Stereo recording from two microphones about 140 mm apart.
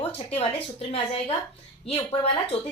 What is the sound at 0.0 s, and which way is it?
A woman's voice, 45° left (ahead or behind).